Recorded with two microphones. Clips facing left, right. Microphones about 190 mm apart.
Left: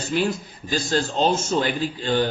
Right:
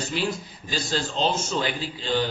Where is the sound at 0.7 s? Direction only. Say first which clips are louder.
Left 5 dB; 50° left (ahead or behind).